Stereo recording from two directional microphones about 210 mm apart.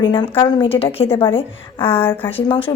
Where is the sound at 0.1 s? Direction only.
25° left (ahead or behind).